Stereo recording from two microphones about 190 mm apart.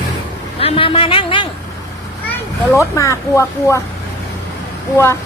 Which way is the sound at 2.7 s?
15° left (ahead or behind).